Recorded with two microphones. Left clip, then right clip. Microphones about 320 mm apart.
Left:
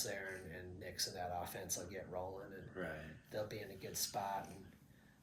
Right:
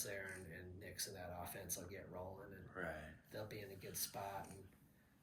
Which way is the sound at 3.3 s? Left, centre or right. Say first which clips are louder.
Left 7 dB; centre.